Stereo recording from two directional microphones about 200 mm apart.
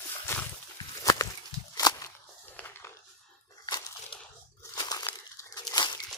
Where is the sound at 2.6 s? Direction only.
10° left (ahead or behind).